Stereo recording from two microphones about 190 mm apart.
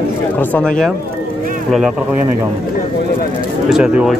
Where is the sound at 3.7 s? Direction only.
5° right (ahead or behind).